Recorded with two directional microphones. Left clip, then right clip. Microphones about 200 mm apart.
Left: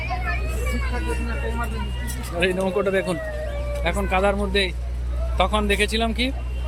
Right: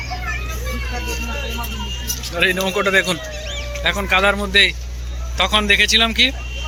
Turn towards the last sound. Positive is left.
turn(degrees=0)  # may be behind; listen again after turning